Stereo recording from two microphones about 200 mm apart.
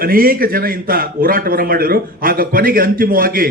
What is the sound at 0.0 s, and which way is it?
A man's voice, 45° right (ahead or behind).